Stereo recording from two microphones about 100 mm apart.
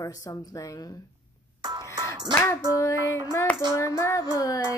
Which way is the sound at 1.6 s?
45° right (ahead or behind).